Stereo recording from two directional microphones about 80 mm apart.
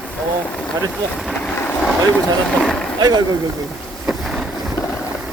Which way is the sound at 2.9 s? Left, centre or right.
Right.